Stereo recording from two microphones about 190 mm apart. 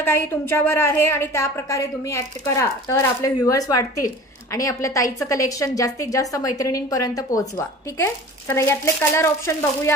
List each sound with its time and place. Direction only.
0.0 s a woman's voice: 10° left (ahead or behind)